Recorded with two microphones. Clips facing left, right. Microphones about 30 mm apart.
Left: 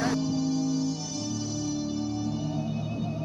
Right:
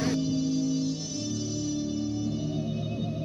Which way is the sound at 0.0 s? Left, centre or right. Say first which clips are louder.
Even; centre.